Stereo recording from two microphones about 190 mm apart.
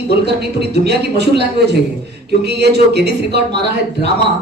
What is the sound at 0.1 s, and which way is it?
Speech, 60° right (ahead or behind).